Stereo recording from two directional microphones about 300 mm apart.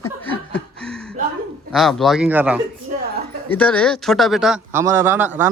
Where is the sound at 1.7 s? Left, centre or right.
Centre.